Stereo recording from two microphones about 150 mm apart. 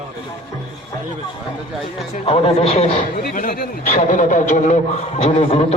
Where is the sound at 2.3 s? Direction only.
40° left (ahead or behind).